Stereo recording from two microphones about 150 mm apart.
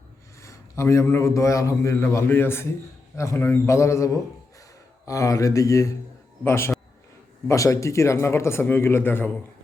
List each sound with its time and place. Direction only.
0.4 s a man's voice: 20° left (ahead or behind)